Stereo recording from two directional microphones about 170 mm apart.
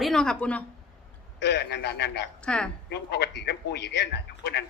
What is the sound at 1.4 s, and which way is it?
Speech, 90° left.